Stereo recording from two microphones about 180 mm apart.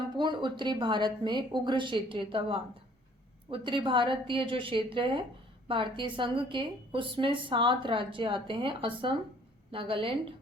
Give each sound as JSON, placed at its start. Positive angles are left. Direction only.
{"t": 0.2, "sound": "a woman's voice", "side_deg": -25}